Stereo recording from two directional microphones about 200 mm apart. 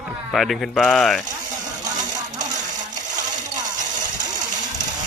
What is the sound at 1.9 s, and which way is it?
Sewing machine, 20° right (ahead or behind).